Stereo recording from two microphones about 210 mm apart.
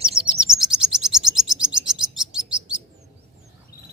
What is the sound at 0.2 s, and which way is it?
Bird, 5° right (ahead or behind).